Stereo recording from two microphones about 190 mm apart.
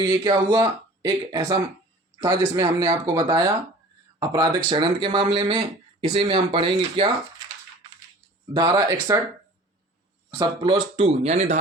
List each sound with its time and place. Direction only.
0.0 s speech: 25° right (ahead or behind)
8.5 s speech: 20° right (ahead or behind)
10.3 s speech: 20° right (ahead or behind); by 11.6 s 35° right (ahead or behind)